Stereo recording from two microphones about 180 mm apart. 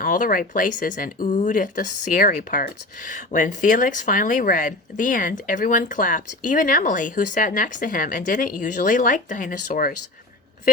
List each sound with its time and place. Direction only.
0.0 s speech: 50° left (ahead or behind)